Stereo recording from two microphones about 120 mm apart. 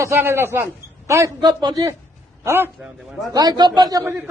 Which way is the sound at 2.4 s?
20° right (ahead or behind).